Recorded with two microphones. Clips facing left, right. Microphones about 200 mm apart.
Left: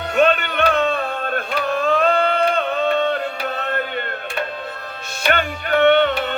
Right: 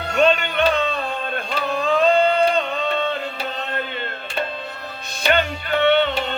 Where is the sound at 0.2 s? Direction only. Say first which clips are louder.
Left 1 dB; 55° left (ahead or behind).